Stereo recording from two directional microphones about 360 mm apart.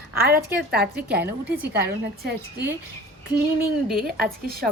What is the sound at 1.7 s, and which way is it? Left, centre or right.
Speech, right.